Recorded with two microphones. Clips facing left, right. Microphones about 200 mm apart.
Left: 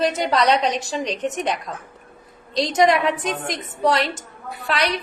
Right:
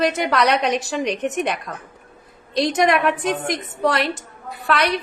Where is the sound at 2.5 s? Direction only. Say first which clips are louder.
Even; 65° right (ahead or behind).